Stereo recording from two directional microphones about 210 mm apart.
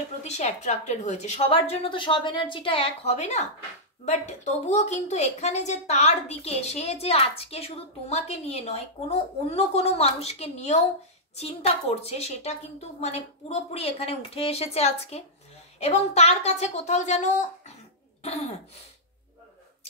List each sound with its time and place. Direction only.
0.2 s a woman's voice: 30° left (ahead or behind)
18.2 s throat clearing: 30° left (ahead or behind)